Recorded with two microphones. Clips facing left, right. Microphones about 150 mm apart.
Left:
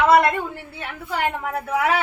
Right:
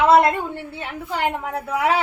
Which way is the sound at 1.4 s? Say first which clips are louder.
Even; 20° right (ahead or behind).